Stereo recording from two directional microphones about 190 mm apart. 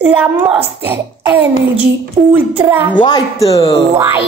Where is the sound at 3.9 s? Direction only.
15° right (ahead or behind).